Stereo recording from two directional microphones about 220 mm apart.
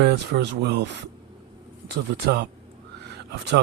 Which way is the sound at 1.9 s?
45° right (ahead or behind).